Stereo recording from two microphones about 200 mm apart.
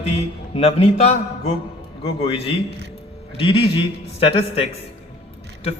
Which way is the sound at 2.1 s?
30° left (ahead or behind).